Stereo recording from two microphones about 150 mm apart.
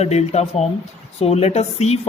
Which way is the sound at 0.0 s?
45° left (ahead or behind).